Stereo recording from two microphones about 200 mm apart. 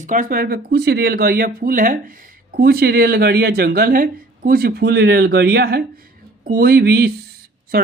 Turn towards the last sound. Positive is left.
turn(degrees=-50)  # may be behind; listen again after turning